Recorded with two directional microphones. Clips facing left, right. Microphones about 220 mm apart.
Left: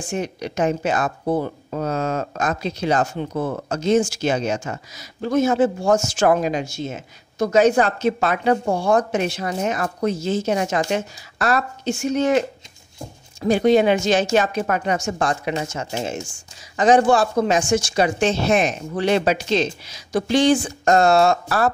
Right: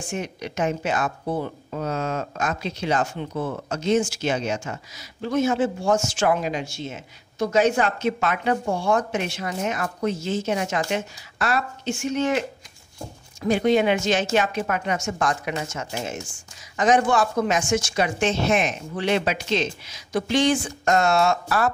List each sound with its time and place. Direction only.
0.1 s speech: 35° left (ahead or behind)